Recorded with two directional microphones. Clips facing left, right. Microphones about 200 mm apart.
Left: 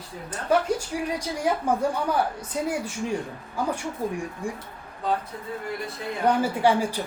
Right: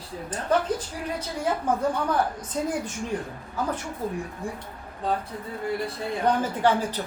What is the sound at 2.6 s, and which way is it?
Speech, 10° left (ahead or behind).